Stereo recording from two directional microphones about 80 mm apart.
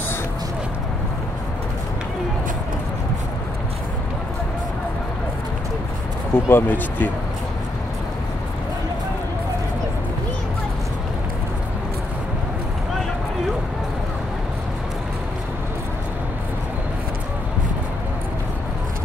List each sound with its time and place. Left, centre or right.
6.3 s speech: left